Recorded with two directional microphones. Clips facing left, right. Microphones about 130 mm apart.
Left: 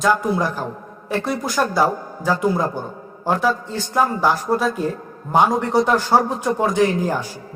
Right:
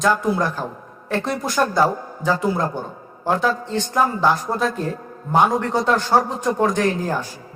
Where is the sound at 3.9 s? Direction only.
5° left (ahead or behind).